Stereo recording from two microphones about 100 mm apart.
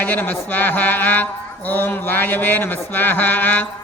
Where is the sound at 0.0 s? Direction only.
15° left (ahead or behind).